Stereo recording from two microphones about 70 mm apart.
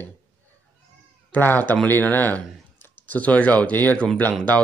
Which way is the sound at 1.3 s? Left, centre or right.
Left.